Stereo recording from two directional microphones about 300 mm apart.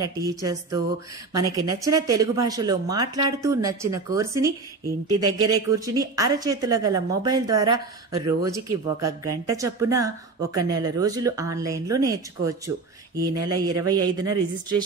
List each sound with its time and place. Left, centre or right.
0.0 s speech: centre
9.0 s speech: right
9.5 s speech: centre